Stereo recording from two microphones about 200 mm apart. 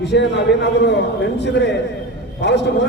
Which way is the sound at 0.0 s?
60° left (ahead or behind).